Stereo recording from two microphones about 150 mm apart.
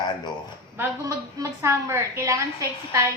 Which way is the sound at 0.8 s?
20° right (ahead or behind).